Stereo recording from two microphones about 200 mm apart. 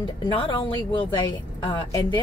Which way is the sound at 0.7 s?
25° left (ahead or behind).